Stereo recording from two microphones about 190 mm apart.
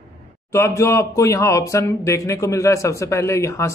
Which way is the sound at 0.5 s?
15° left (ahead or behind).